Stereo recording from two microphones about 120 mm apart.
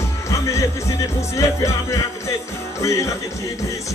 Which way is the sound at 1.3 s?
25° left (ahead or behind).